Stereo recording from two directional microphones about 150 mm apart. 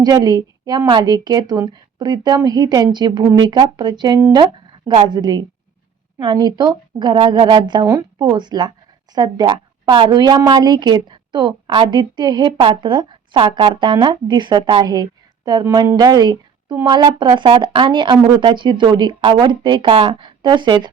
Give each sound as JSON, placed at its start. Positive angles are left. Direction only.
{"t": 0.0, "sound": "a woman's voice", "side_deg": -25}